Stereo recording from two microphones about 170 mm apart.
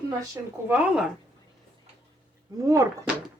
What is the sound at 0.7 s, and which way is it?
Speech, 5° right (ahead or behind).